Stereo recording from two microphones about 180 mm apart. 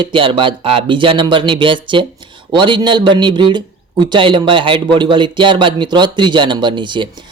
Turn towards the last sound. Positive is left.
turn(degrees=-25)  # may be behind; listen again after turning